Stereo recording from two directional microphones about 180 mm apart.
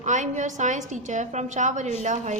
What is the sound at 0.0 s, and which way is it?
A woman's voice, 40° right (ahead or behind).